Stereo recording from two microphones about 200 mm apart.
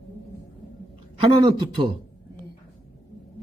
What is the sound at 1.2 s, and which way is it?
Speech, 25° right (ahead or behind).